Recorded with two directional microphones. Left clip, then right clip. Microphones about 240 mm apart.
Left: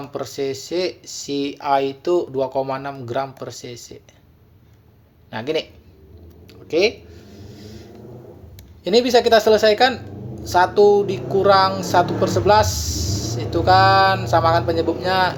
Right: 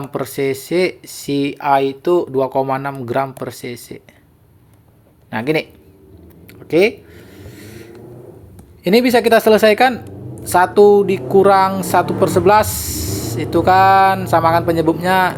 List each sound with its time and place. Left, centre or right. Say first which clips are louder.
0.0 s a woman's voice: right 5 dB; right
5.3 s a woman's voice: right 5 dB; right
6.5 s a sound: right 4 dB; right
8.8 s a woman's voice: right 2 dB; right